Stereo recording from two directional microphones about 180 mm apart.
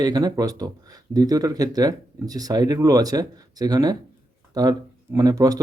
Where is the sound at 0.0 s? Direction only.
20° right (ahead or behind).